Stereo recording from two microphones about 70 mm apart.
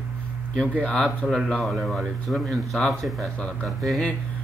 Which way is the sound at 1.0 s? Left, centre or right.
Centre.